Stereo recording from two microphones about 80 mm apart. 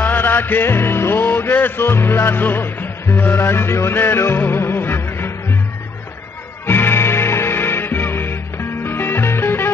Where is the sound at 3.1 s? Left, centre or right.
Left.